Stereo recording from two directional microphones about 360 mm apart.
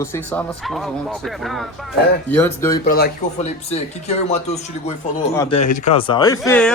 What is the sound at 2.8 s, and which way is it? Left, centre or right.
A man's voice, left.